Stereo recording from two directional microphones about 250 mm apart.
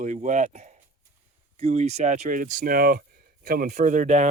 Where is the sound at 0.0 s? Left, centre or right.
Right.